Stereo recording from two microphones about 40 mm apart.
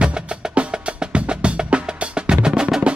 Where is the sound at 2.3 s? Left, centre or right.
Centre.